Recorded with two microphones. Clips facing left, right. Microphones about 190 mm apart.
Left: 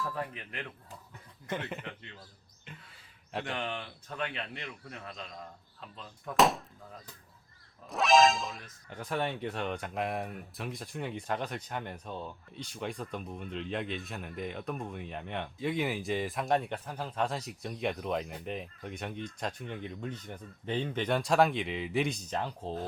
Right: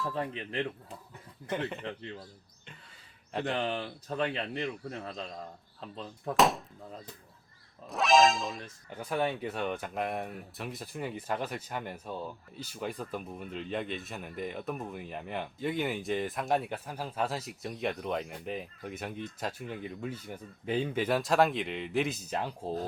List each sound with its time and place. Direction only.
0.0 s speech: 25° right (ahead or behind)
1.5 s speech: centre (ahead or behind)
1.8 s a man's voice: 30° right (ahead or behind)
3.4 s a man's voice: 35° right (ahead or behind)
6.3 s speech: centre (ahead or behind)
7.9 s speech: centre (ahead or behind)